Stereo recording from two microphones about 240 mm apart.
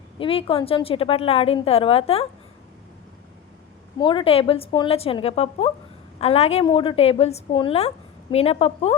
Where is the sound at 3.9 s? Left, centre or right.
Centre.